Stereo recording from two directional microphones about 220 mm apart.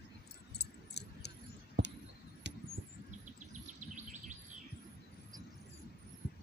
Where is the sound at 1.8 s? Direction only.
50° right (ahead or behind).